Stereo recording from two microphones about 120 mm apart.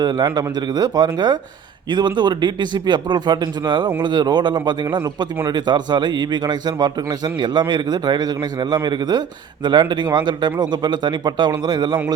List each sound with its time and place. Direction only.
0.0 s a man's voice: 35° right (ahead or behind)